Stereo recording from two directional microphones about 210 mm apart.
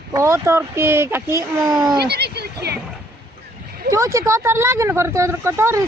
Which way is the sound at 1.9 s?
50° right (ahead or behind).